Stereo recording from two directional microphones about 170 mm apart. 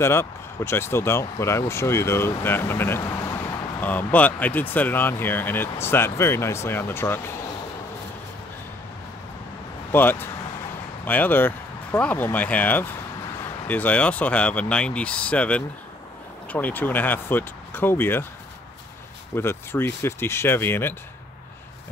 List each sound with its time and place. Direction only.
0.0 s speech: 15° left (ahead or behind)
9.9 s speech: 10° left (ahead or behind)
19.3 s speech: 15° left (ahead or behind)